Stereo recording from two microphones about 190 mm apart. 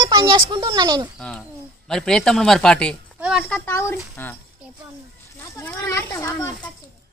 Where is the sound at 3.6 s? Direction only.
15° left (ahead or behind).